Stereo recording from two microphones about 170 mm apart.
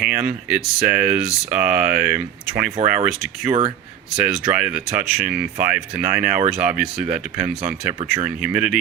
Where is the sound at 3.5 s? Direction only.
35° right (ahead or behind).